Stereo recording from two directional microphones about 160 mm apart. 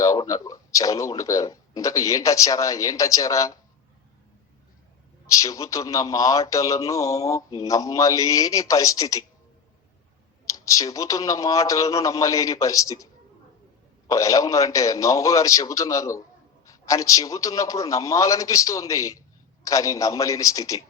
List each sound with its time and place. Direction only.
0.0 s a man's voice: 20° left (ahead or behind)
5.2 s a man's voice: 20° left (ahead or behind)
10.5 s a man's voice: 20° left (ahead or behind)
14.1 s a man's voice: 20° left (ahead or behind)